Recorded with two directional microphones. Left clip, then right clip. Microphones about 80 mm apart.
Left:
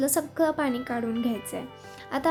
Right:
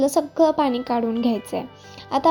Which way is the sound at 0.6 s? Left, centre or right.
Right.